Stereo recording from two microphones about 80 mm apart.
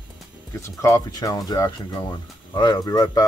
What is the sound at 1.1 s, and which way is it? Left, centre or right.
Speech, left.